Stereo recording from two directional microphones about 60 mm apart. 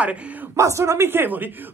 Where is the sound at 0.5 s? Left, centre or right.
Right.